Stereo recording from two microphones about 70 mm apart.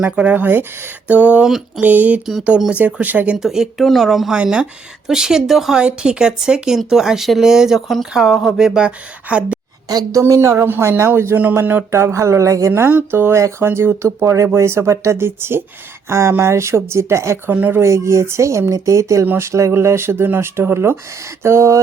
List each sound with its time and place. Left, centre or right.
0.0 s speech: centre
1.5 s speech: centre
1.8 s speech: right
2.8 s speech: right
3.3 s speech: centre
10.1 s speech: right
11.9 s speech: right
17.5 s speech: right
17.7 s speech: right
19.2 s speech: right